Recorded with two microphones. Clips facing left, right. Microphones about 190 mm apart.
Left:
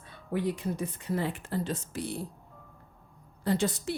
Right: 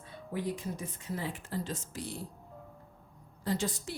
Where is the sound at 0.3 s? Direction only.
65° left (ahead or behind).